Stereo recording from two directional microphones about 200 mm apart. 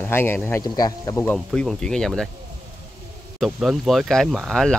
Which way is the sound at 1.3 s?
Centre (ahead or behind).